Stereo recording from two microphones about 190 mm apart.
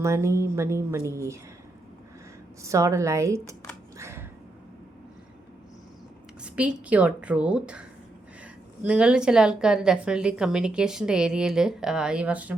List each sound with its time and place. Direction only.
0.0 s speech: 15° right (ahead or behind)
2.6 s speech: 15° right (ahead or behind)
3.9 s a sound: 15° right (ahead or behind)
6.4 s a woman's voice: 5° right (ahead or behind)